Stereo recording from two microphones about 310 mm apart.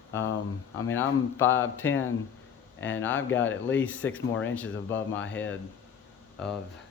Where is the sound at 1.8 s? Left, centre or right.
Left.